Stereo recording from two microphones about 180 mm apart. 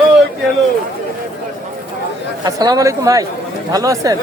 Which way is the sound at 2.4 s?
20° right (ahead or behind).